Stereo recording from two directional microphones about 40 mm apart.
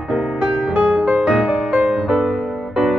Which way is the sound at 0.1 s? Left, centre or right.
Centre.